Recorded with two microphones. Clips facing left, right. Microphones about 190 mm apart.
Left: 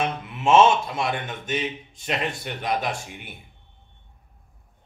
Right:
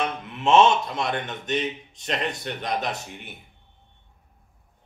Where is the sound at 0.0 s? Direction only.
10° left (ahead or behind).